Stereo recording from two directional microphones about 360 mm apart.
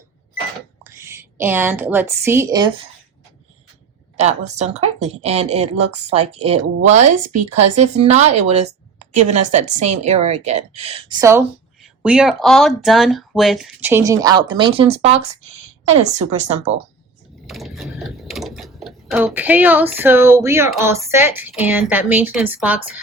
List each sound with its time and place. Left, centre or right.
0.9 s a woman's voice: centre
4.2 s speech: centre
17.4 s speech: centre